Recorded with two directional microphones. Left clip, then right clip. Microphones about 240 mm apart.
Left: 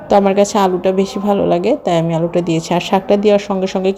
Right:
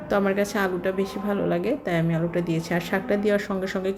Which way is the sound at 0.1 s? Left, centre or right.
Left.